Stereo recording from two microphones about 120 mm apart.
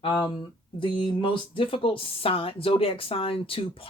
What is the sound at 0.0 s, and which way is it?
Speech, 40° left (ahead or behind).